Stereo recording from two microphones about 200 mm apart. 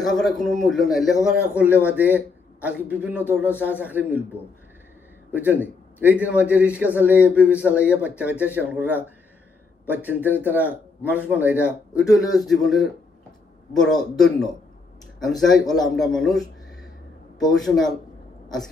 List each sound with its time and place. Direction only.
0.0 s a man's voice: centre (ahead or behind)